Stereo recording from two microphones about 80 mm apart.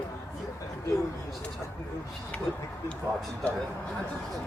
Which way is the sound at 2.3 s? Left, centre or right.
Centre.